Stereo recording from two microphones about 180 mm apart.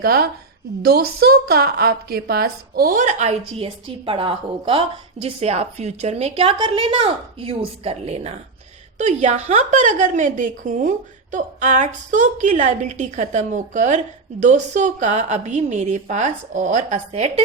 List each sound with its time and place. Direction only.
0.0 s a woman's voice: 60° right (ahead or behind); by 17.4 s 35° right (ahead or behind)